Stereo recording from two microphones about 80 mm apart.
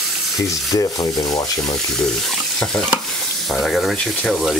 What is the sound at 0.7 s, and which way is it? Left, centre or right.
Frying, left.